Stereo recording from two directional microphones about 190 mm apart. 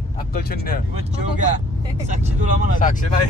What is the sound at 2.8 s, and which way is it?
Speech, 45° left (ahead or behind).